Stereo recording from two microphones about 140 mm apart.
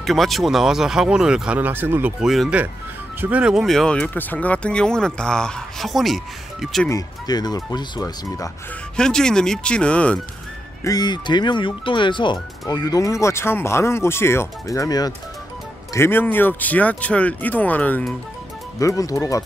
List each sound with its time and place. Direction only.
0.0 s speech: centre (ahead or behind)
2.2 s speech: centre (ahead or behind)
3.2 s speech: 10° right (ahead or behind)
6.9 s speech: 25° left (ahead or behind)
8.9 s speech: 5° left (ahead or behind)
10.8 s speech: 25° left (ahead or behind)
15.9 s speech: 15° left (ahead or behind)
18.8 s speech: 25° left (ahead or behind)